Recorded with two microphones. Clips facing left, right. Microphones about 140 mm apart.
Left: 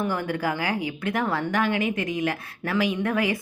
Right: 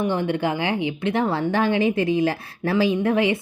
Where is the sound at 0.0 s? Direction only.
25° right (ahead or behind).